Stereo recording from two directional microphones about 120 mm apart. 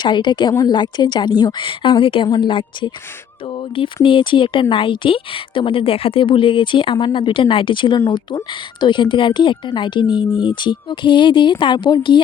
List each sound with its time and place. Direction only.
0.0 s a woman's voice: 40° left (ahead or behind)